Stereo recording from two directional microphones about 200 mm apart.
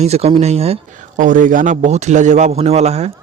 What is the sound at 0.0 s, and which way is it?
A man's voice, 30° right (ahead or behind).